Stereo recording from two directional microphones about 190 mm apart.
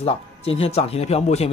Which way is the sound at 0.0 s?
30° left (ahead or behind).